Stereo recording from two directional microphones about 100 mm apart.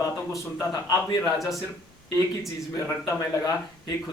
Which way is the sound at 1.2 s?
Centre (ahead or behind).